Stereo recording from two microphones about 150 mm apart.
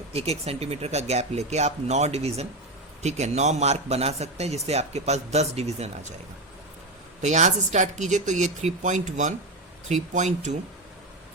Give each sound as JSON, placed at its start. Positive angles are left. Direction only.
{"t": 0.1, "sound": "a man's voice", "side_deg": -45}
{"t": 7.2, "sound": "a man's voice", "side_deg": -50}